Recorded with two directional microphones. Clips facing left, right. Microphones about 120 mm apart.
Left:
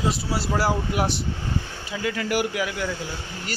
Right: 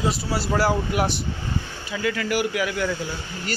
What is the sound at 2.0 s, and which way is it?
Speech, 25° left (ahead or behind).